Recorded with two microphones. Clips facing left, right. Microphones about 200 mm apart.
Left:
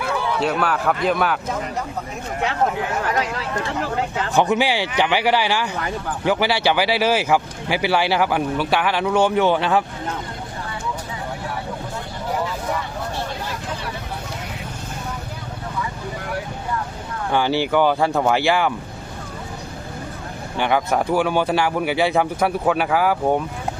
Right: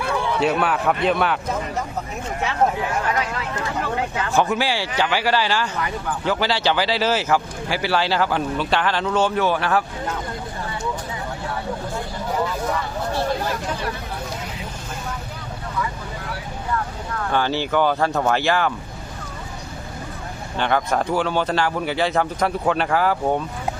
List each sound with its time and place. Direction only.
0.0 s a sound: centre (ahead or behind)
0.6 s speech: centre (ahead or behind)
4.3 s speech: 20° left (ahead or behind)
17.3 s speech: 15° left (ahead or behind)
20.6 s speech: 10° left (ahead or behind)